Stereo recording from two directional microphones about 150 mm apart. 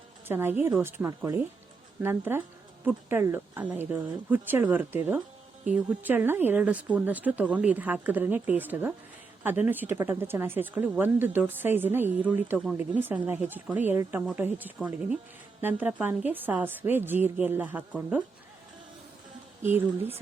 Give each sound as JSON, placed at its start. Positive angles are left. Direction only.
{"t": 0.3, "sound": "speech", "side_deg": -15}